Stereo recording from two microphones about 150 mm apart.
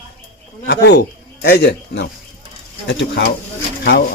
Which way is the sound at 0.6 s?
90° left.